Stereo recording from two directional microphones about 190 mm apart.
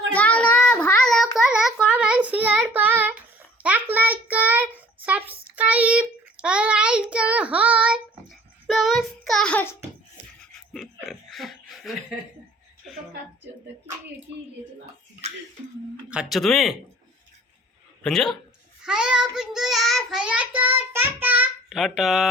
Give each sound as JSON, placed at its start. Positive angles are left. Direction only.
{"t": 0.1, "sound": "child singing", "side_deg": 5}
{"t": 10.7, "sound": "a sound", "side_deg": 0}
{"t": 16.0, "sound": "speech", "side_deg": -5}
{"t": 18.0, "sound": "speech", "side_deg": 5}
{"t": 18.8, "sound": "child singing", "side_deg": -5}